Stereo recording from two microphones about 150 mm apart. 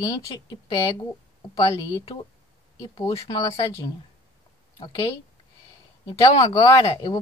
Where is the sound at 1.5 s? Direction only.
35° left (ahead or behind).